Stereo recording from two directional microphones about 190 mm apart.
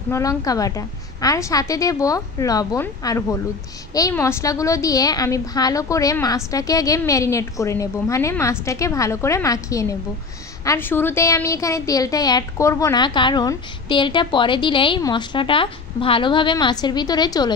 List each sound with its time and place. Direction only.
0.1 s a woman's voice: 20° left (ahead or behind)